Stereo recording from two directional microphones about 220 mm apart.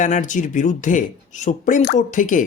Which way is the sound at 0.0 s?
35° left (ahead or behind).